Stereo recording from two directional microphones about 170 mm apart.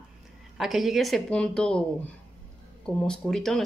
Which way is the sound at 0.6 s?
Centre (ahead or behind).